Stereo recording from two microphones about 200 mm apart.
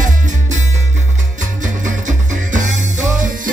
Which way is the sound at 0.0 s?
40° right (ahead or behind).